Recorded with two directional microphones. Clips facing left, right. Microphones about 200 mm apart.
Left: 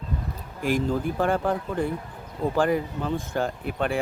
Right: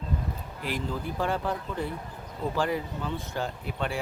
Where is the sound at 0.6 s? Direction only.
45° left (ahead or behind).